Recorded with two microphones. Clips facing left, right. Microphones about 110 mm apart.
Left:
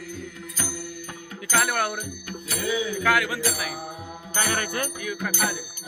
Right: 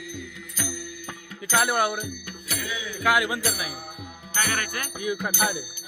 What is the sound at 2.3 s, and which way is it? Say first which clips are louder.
Music: left 6 dB; 35° left (ahead or behind).